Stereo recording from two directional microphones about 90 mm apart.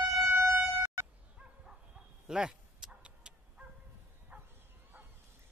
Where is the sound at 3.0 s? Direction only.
10° right (ahead or behind).